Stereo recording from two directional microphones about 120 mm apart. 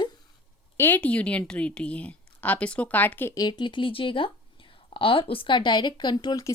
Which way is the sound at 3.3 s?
35° left (ahead or behind).